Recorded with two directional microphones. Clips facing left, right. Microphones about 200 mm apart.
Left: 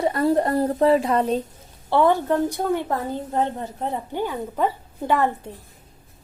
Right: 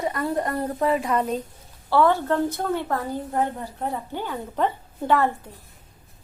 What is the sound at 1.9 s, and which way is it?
A woman's voice, 20° left (ahead or behind).